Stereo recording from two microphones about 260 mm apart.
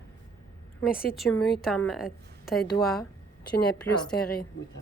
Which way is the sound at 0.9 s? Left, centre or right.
Left.